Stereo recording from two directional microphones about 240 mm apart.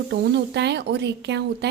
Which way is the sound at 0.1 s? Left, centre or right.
Right.